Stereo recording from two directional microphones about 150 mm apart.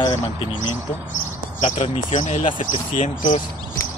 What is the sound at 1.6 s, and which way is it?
Speech, 55° left (ahead or behind).